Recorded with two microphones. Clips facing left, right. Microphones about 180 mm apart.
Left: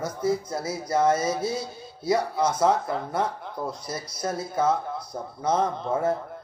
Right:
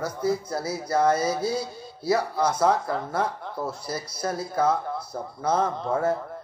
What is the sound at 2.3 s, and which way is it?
Speech, 25° left (ahead or behind).